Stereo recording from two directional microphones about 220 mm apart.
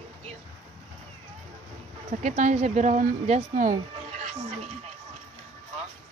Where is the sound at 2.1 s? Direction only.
30° right (ahead or behind).